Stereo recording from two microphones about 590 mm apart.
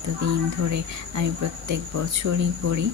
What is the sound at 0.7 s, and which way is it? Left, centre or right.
Speech, right.